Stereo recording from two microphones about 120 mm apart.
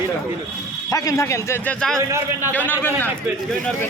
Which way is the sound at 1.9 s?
25° right (ahead or behind).